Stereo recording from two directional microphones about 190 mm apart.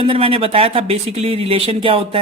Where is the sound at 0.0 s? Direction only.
30° right (ahead or behind).